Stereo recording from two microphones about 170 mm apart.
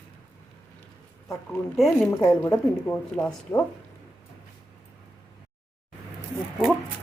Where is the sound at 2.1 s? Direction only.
20° left (ahead or behind).